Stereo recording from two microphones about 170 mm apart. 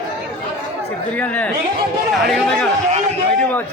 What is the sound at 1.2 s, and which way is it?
A man's voice, 10° left (ahead or behind).